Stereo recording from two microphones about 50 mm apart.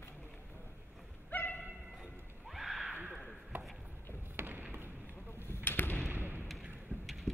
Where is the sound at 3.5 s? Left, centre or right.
Right.